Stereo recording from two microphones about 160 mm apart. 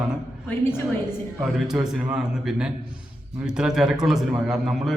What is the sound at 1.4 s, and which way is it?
A man's voice, 5° right (ahead or behind).